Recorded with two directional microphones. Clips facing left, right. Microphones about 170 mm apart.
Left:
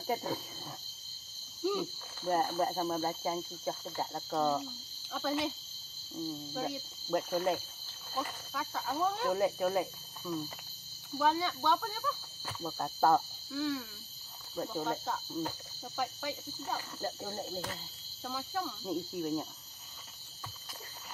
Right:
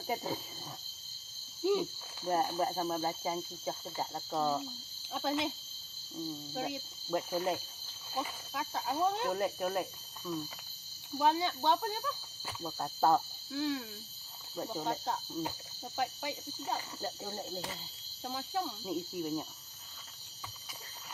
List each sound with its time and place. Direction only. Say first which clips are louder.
0.0 s speech: left 2 dB; 10° right (ahead or behind)
6.5 s speech: left 1 dB; 10° right (ahead or behind)
7.2 s speech: left 2 dB; centre (ahead or behind)
8.5 s speech: right 1 dB; 20° right (ahead or behind)
9.3 s speech: left 3 dB; centre (ahead or behind)
11.1 s speech: right 1 dB; 20° right (ahead or behind)
12.4 s speech: left 1 dB; 5° right (ahead or behind)
13.5 s speech: even; 20° right (ahead or behind)
17.0 s speech: left 2 dB; centre (ahead or behind)
18.2 s speech: right 1 dB; 30° right (ahead or behind)
18.9 s speech: left 1 dB; centre (ahead or behind)